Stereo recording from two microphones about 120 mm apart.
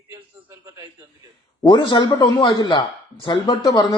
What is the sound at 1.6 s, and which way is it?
Speech, 40° left (ahead or behind).